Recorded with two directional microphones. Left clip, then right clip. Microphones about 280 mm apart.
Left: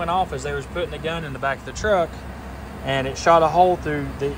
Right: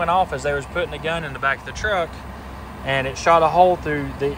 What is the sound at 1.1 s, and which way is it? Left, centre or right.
Speech, centre.